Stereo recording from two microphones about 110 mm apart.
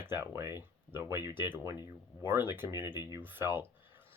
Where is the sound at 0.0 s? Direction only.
20° right (ahead or behind).